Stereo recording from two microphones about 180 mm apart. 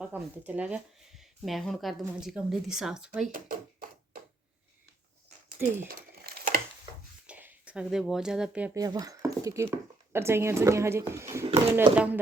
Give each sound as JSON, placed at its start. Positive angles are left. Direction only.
{"t": 0.0, "sound": "speech", "side_deg": -10}
{"t": 3.3, "sound": "a sound", "side_deg": -50}
{"t": 5.9, "sound": "crumpling", "side_deg": -55}
{"t": 7.3, "sound": "speech", "side_deg": -10}
{"t": 8.7, "sound": "speech", "side_deg": -20}